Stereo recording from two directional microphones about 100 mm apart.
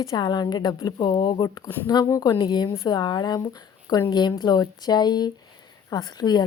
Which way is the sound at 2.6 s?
30° left (ahead or behind).